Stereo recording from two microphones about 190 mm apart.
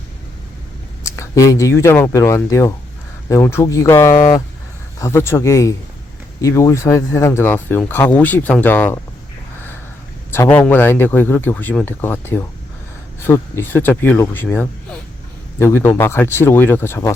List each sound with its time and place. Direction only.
1.0 s speech: 15° left (ahead or behind)
10.3 s speech: 10° left (ahead or behind)